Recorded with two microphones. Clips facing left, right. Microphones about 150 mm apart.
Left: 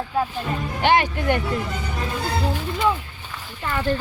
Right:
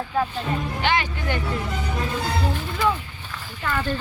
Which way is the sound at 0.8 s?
55° left (ahead or behind).